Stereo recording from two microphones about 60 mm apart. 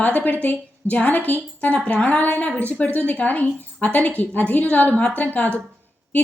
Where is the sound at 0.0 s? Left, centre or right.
Left.